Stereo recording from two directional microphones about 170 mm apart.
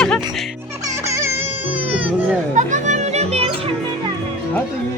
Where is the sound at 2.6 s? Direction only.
45° right (ahead or behind).